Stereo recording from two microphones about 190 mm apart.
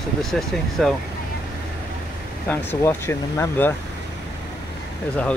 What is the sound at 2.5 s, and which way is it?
Speech, 10° left (ahead or behind).